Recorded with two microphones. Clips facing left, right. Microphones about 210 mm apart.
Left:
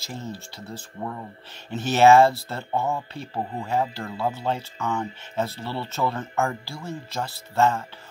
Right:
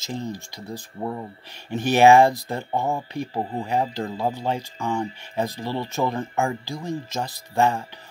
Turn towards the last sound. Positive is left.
turn(degrees=-15)  # may be behind; listen again after turning